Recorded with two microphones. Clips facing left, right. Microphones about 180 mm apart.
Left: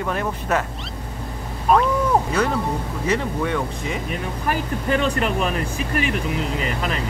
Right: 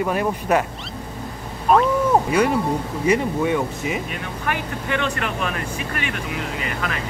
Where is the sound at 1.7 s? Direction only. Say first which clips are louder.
Right 1 dB; centre (ahead or behind).